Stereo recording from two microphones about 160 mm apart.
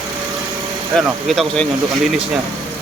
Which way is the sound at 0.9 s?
Centre (ahead or behind).